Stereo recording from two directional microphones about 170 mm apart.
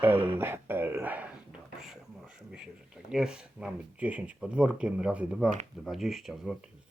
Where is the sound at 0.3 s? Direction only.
15° right (ahead or behind).